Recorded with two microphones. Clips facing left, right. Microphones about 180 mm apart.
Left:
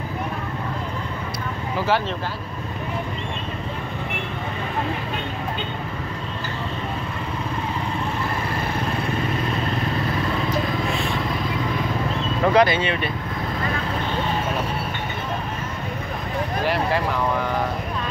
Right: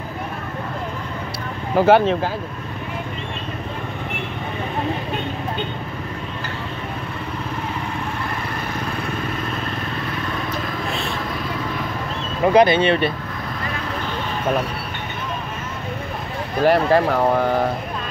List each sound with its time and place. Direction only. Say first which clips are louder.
1.8 s speech: right 9 dB; 55° right (ahead or behind)
12.5 s speech: right 6 dB; 25° right (ahead or behind)
16.6 s speech: right 9 dB; 50° right (ahead or behind)